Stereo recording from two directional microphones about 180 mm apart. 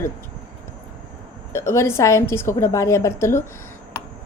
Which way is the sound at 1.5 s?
15° left (ahead or behind).